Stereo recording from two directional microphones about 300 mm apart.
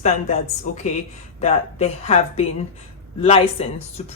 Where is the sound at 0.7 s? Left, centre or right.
Left.